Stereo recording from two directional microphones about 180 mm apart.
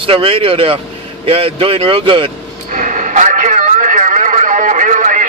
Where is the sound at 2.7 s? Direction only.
45° right (ahead or behind).